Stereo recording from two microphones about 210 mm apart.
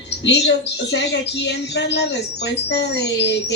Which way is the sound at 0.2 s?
55° left (ahead or behind).